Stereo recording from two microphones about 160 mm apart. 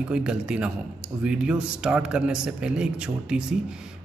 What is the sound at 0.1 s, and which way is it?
Speech, 5° right (ahead or behind).